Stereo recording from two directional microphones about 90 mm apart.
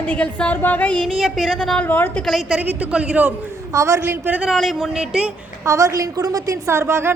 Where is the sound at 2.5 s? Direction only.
15° right (ahead or behind).